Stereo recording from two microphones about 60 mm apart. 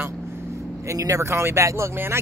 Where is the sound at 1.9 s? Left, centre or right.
Right.